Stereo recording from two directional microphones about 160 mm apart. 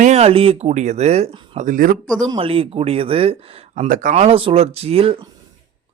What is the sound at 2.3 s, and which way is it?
Speech, 35° right (ahead or behind).